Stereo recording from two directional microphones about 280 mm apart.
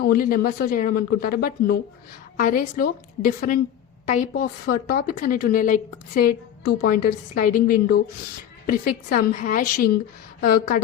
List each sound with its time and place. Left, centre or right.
0.0 s a woman's voice: left